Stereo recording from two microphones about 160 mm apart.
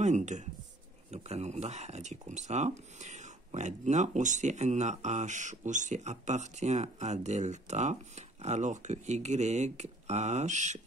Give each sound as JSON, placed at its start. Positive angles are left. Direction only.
{"t": 0.0, "sound": "speech", "side_deg": -50}